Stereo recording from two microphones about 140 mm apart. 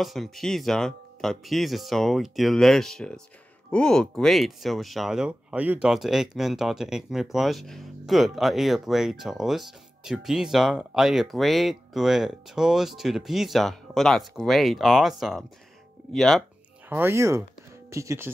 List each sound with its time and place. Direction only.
0.0 s speech: centre (ahead or behind)
16.9 s speech: 15° right (ahead or behind)